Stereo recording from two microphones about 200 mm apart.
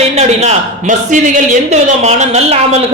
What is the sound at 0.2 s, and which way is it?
A man's voice, 35° right (ahead or behind).